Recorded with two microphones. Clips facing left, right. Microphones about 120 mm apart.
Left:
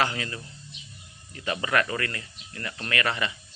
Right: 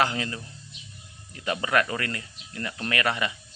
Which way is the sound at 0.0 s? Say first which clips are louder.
Right 2 dB; 20° right (ahead or behind).